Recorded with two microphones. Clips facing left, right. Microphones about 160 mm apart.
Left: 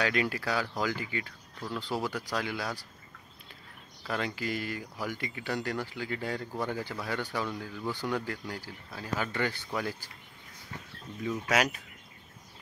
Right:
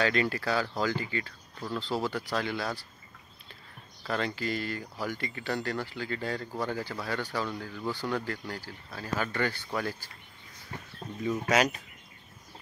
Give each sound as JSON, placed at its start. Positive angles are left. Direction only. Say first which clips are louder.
{"t": 0.0, "sound": "speech", "louder": "right 2 dB", "side_deg": 10}
{"t": 4.0, "sound": "speech", "louder": "right 2 dB", "side_deg": 10}
{"t": 11.2, "sound": "speech", "louder": "right 2 dB", "side_deg": 5}